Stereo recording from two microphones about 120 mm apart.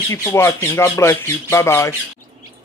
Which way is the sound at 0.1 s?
20° left (ahead or behind).